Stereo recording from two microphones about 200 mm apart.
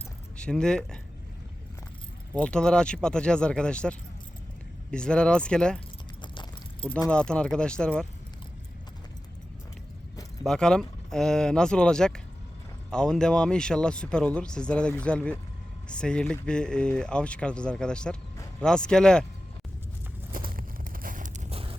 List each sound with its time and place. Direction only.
0.3 s speech: 5° left (ahead or behind)
2.3 s speech: 5° left (ahead or behind)
7.1 s speech: 5° left (ahead or behind)
10.4 s speech: 5° left (ahead or behind)
20.3 s a sound: 45° right (ahead or behind); by 21.8 s 30° right (ahead or behind)